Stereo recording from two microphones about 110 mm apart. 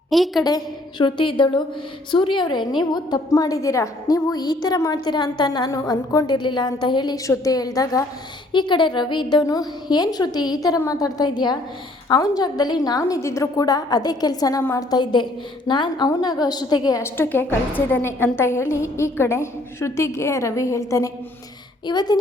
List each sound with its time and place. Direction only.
0.1 s a woman's voice: centre (ahead or behind)
0.4 s a sound: 40° left (ahead or behind)
2.0 s a woman's voice: 45° left (ahead or behind)
8.5 s a woman's voice: 45° left (ahead or behind)
14.6 s a woman's voice: 20° left (ahead or behind)
14.8 s a woman's voice: 40° left (ahead or behind)
17.0 s a woman's voice: 20° left (ahead or behind); by 22.2 s 40° left (ahead or behind)